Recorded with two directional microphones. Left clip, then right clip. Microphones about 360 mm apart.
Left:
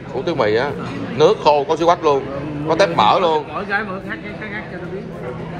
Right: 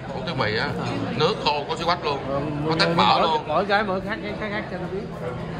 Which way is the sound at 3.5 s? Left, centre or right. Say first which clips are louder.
Right 1 dB; right.